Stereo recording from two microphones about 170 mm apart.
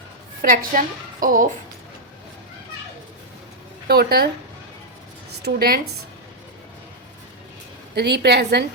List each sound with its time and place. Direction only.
0.4 s a woman's voice: 55° right (ahead or behind)
3.8 s speech: 65° right (ahead or behind)
5.4 s speech: 70° right (ahead or behind)
7.9 s a woman's voice: 80° right